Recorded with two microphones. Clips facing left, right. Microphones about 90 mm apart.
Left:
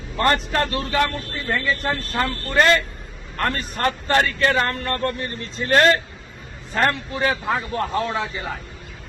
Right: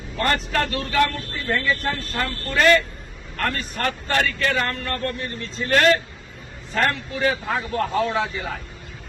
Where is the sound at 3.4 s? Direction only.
35° left (ahead or behind).